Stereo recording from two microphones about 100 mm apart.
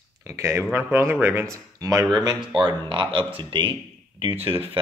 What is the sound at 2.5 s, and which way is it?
Speech, 55° right (ahead or behind).